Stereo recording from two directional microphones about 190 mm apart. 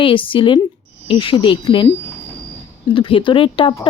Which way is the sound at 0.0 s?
25° left (ahead or behind).